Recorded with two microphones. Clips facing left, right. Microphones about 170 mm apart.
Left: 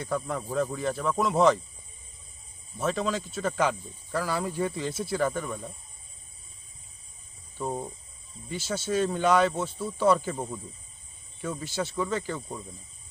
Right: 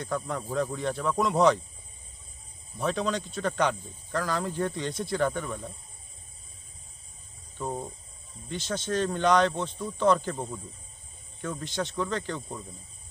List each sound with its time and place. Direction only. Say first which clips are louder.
0.0 s speech: left 1 dB; 5° left (ahead or behind)
2.7 s speech: even; centre (ahead or behind)
7.6 s speech: left 1 dB; 10° left (ahead or behind)